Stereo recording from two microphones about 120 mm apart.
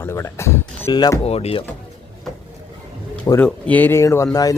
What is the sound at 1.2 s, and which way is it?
Speech, 60° left (ahead or behind).